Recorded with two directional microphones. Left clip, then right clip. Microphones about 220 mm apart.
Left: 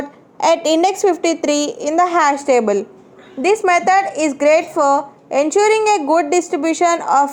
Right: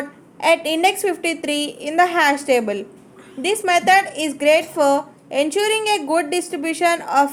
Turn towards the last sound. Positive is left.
turn(degrees=20)  # may be behind; listen again after turning